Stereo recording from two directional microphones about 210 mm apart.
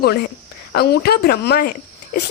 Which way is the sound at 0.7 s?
50° left (ahead or behind).